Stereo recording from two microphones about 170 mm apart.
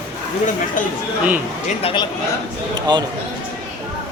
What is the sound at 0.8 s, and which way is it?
Speech, 50° left (ahead or behind).